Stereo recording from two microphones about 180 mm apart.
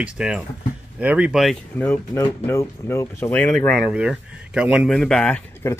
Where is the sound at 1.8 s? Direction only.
10° left (ahead or behind).